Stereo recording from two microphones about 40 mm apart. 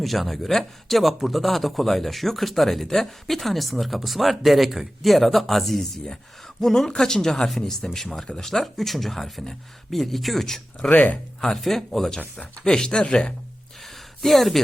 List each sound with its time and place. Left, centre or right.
0.0 s speech: centre
10.8 s speech: left
11.3 s speech: centre
12.4 s speech: centre
13.8 s a sound: centre